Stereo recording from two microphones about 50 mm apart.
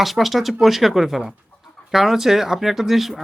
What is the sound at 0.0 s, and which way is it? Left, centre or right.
Speech, centre.